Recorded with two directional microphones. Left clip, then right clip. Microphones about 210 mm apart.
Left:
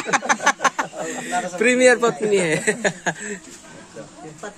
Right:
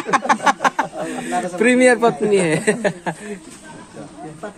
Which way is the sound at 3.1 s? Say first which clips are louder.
Left 1 dB; 25° left (ahead or behind).